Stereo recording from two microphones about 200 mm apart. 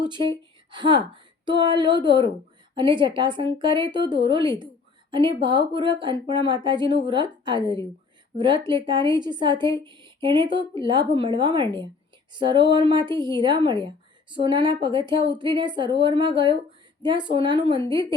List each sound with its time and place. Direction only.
0.0 s a woman's voice: 25° right (ahead or behind)